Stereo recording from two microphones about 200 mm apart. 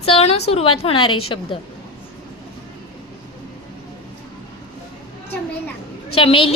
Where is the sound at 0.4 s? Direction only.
30° left (ahead or behind).